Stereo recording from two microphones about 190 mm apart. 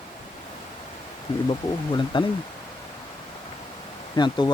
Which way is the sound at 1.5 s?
25° left (ahead or behind).